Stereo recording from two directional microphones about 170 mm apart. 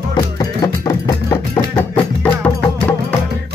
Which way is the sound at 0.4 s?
20° left (ahead or behind).